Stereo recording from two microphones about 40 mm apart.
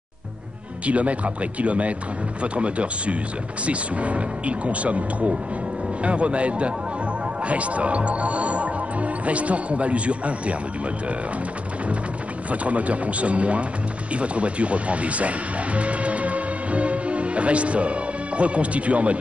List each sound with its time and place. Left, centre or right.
0.8 s speech: right
12.4 s speech: right